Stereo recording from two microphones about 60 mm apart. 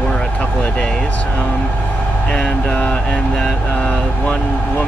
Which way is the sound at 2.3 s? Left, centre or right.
Centre.